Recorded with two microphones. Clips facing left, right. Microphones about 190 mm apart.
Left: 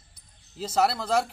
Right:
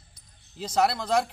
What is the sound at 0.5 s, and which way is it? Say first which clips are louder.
Speech: even; 5° left (ahead or behind).